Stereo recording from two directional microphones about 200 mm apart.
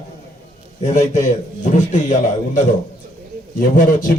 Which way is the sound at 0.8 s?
35° left (ahead or behind).